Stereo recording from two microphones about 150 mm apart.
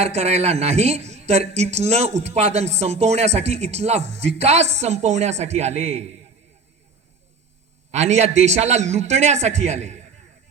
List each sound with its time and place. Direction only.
0.0 s speech: 45° right (ahead or behind)
7.9 s speech: 50° right (ahead or behind)